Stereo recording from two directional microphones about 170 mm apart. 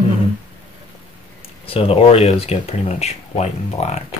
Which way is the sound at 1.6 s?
35° left (ahead or behind).